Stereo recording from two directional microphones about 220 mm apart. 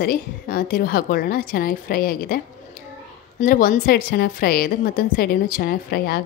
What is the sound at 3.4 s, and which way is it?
A woman's voice, 40° left (ahead or behind).